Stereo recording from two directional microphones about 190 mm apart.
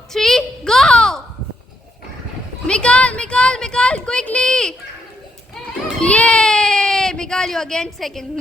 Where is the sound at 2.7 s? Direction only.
5° left (ahead or behind).